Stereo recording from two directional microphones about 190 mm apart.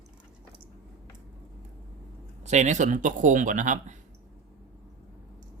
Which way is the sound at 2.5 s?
40° right (ahead or behind).